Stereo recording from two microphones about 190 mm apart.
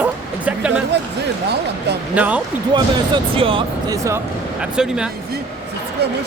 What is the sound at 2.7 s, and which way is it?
Speech, 25° right (ahead or behind).